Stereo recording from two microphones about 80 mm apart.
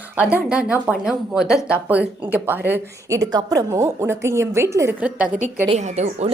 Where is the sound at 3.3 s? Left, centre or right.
Right.